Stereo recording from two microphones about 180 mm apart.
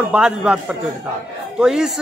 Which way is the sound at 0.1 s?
5° right (ahead or behind).